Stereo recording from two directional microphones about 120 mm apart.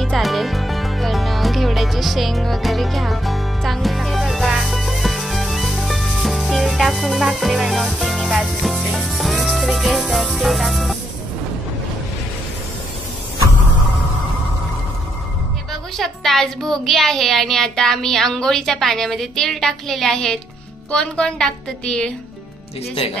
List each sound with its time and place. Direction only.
0.0 s music: centre (ahead or behind)
16.0 s a child's voice: centre (ahead or behind)